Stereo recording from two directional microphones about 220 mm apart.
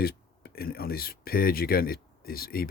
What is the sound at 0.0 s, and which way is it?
Speech, 45° left (ahead or behind).